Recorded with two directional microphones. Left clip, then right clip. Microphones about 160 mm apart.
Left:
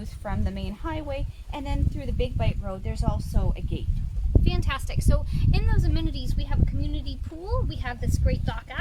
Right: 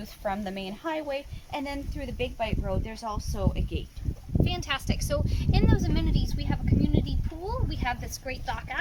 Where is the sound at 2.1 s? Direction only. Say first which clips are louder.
Right 1 dB; 55° left (ahead or behind); by 3.8 s 80° left.